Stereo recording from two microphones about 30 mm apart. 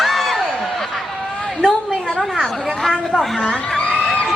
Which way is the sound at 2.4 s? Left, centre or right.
Centre.